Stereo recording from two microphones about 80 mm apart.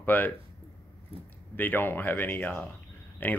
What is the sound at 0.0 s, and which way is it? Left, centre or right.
Speech, left.